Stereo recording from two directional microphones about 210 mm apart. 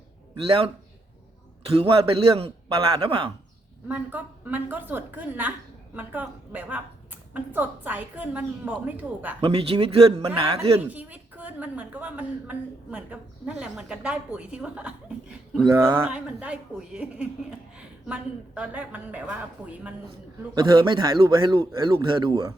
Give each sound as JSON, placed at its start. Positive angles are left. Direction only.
{"t": 0.3, "sound": "a man's voice", "side_deg": -25}
{"t": 3.8, "sound": "a woman's voice", "side_deg": -10}
{"t": 9.4, "sound": "a man's voice", "side_deg": -25}
{"t": 10.8, "sound": "a woman's voice", "side_deg": -5}
{"t": 20.6, "sound": "a man's voice", "side_deg": -20}